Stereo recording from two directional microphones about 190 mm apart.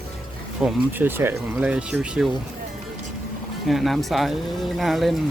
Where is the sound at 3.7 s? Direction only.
Centre (ahead or behind).